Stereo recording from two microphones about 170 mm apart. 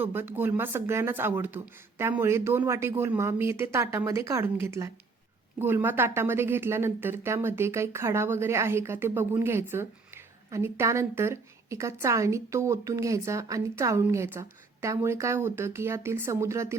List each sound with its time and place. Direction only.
0.0 s a woman's voice: 10° right (ahead or behind)